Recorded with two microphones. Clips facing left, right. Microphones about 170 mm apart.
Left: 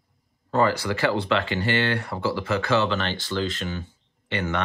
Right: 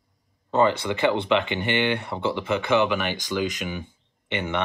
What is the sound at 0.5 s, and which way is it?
Speech, 20° right (ahead or behind).